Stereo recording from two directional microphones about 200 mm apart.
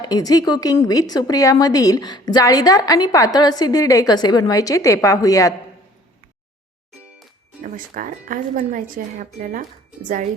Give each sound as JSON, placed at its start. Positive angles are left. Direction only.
{"t": 0.0, "sound": "a woman's voice", "side_deg": 20}
{"t": 7.6, "sound": "speech", "side_deg": -45}